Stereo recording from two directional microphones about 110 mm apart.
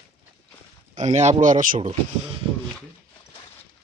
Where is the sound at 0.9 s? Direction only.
90° right.